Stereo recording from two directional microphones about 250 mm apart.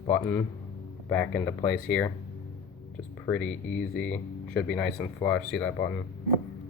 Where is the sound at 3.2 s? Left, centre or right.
Centre.